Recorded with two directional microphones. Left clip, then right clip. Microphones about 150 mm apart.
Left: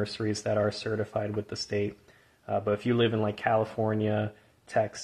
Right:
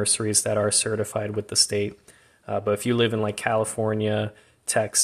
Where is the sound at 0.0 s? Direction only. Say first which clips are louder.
Right 6 dB; 30° right (ahead or behind).